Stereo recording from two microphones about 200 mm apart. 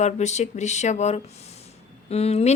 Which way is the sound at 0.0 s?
35° left (ahead or behind).